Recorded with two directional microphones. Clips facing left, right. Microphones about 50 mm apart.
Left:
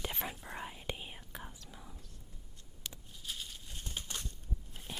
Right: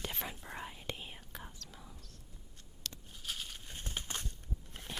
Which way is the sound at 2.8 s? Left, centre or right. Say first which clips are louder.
Right 1 dB; centre.